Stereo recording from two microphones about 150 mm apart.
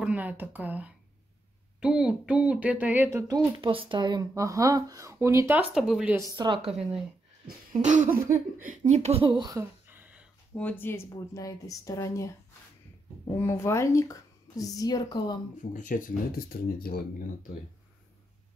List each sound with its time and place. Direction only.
0.0 s speech: 10° right (ahead or behind)
3.6 s speech: 35° right (ahead or behind); by 6.1 s 5° right (ahead or behind)
6.3 s speech: 30° right (ahead or behind)
7.8 s a sound: 55° right (ahead or behind)
8.6 s speech: 50° right (ahead or behind); by 9.6 s 30° right (ahead or behind)
9.6 s a sound: 15° right (ahead or behind)
10.5 s speech: 10° left (ahead or behind)
13.3 s speech: 20° left (ahead or behind)
15.7 s speech: 60° left (ahead or behind); by 17.5 s 90° left